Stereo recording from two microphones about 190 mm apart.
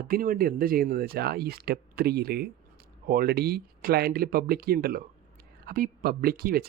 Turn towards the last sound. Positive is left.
turn(degrees=-50)  # may be behind; listen again after turning